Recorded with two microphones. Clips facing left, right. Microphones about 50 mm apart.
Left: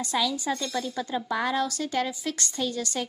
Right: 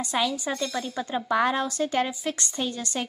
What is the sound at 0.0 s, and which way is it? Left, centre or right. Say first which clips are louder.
A woman's voice: right 1 dB; right.